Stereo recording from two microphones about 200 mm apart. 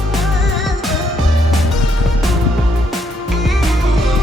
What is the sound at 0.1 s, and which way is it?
Music, centre (ahead or behind).